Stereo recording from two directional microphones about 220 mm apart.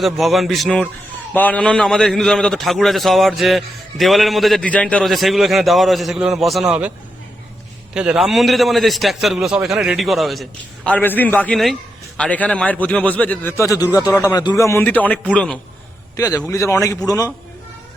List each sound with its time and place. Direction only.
0.0 s a man's voice: centre (ahead or behind)
7.9 s a man's voice: 5° right (ahead or behind)
16.1 s a man's voice: 15° left (ahead or behind)